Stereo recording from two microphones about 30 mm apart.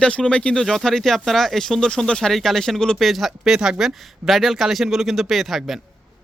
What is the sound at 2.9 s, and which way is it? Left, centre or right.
Speech, centre.